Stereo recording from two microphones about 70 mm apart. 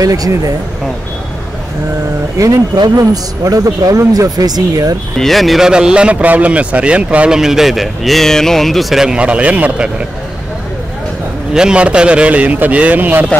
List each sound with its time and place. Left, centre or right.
0.0 s speech: right
2.3 s speech: right
5.2 s speech: centre
5.7 s a man's voice: centre
7.3 s speech: centre
11.5 s a man's voice: centre